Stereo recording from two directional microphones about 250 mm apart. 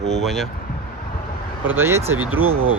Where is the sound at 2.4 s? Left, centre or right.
Right.